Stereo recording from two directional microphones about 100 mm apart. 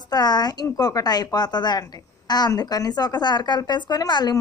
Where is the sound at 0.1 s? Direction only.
45° left (ahead or behind).